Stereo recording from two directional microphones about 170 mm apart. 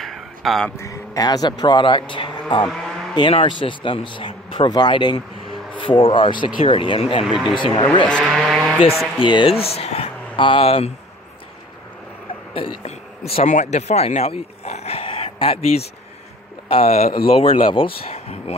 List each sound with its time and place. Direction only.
0.0 s a sound: centre (ahead or behind)
0.7 s speech: 20° left (ahead or behind)
8.2 s vehicle: 5° right (ahead or behind)
9.2 s speech: 30° left (ahead or behind)
12.5 s speech: 35° left (ahead or behind)